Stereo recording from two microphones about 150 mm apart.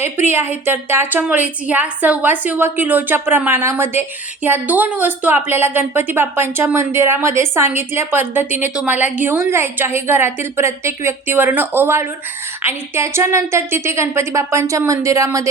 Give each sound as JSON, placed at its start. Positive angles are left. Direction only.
{"t": 0.3, "sound": "a woman's voice", "side_deg": -15}